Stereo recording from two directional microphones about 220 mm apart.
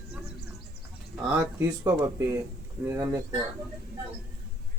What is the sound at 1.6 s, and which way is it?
Speech, 10° right (ahead or behind).